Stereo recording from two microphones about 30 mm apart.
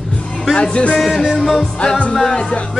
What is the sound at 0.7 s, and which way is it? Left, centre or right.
Speech, left.